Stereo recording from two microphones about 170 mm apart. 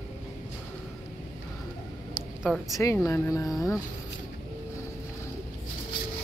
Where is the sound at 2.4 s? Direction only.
Centre (ahead or behind).